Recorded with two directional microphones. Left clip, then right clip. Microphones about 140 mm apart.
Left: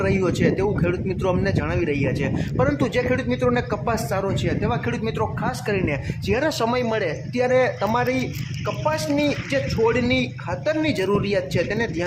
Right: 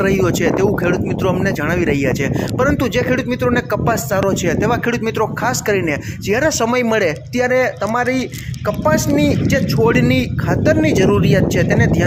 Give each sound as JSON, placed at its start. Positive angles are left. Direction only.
{"t": 0.0, "sound": "speech", "side_deg": -30}
{"t": 4.4, "sound": "speech", "side_deg": -45}
{"t": 9.1, "sound": "speech", "side_deg": -40}